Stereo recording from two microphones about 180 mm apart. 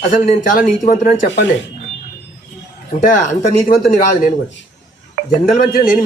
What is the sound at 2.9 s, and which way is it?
A man's voice, 40° left (ahead or behind).